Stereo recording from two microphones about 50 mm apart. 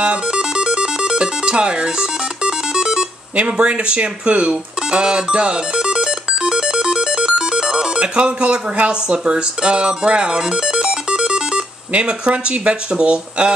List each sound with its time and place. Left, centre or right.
0.0 s music: centre
11.9 s speech: right